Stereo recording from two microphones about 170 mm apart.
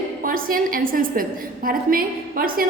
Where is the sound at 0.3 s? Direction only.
55° right (ahead or behind).